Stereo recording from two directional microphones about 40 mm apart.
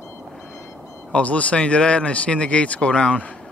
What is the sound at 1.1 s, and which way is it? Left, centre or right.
Speech, left.